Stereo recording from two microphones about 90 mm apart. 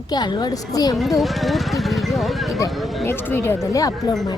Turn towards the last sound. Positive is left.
turn(degrees=40)  # may be behind; listen again after turning